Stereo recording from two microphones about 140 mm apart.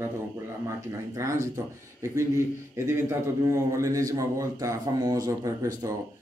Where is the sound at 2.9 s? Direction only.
20° right (ahead or behind).